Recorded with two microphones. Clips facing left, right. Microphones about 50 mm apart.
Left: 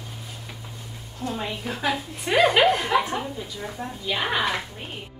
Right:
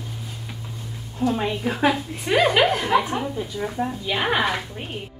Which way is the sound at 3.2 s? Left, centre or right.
Centre.